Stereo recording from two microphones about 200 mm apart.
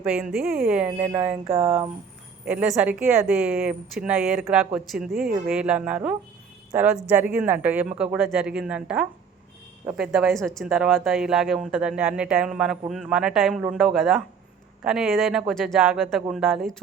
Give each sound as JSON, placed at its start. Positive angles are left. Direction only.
{"t": 0.0, "sound": "speech", "side_deg": -5}
{"t": 1.5, "sound": "speech", "side_deg": -30}
{"t": 2.4, "sound": "a woman's voice", "side_deg": -5}